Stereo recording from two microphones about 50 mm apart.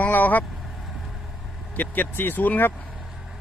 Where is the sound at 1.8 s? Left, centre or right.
Left.